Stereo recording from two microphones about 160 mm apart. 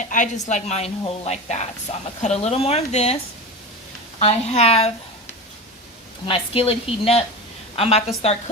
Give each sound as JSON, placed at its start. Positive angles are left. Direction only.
{"t": 0.0, "sound": "a woman's voice", "side_deg": 50}
{"t": 4.2, "sound": "speech", "side_deg": 40}
{"t": 6.2, "sound": "speech", "side_deg": 35}